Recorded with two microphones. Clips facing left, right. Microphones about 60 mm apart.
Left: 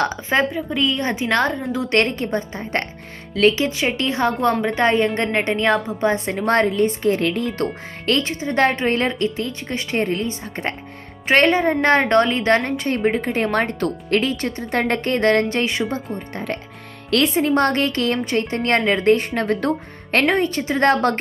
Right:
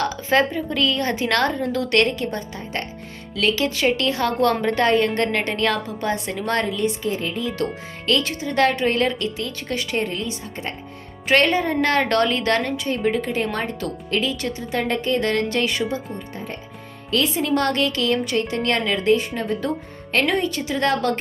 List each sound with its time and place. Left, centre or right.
0.5 s a woman's voice: centre
1.7 s a woman's voice: left
7.6 s a woman's voice: left
8.2 s a woman's voice: left
10.5 s speech: left
11.3 s a woman's voice: left
15.4 s a woman's voice: left
16.3 s speech: left
17.3 s a woman's voice: left